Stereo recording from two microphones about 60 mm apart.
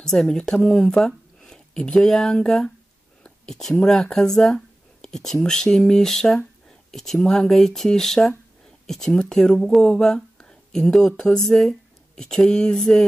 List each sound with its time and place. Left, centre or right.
0.0 s speech: centre
0.7 s a sound: centre
2.0 s speech: centre